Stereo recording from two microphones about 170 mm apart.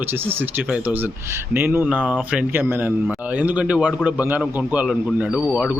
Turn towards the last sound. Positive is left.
turn(degrees=-5)  # may be behind; listen again after turning